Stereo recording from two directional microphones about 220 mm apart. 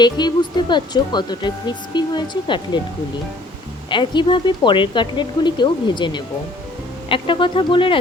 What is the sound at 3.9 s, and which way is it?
Speech, 20° left (ahead or behind).